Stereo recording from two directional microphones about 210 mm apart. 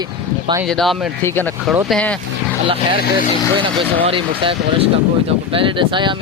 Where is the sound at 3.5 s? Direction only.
25° right (ahead or behind).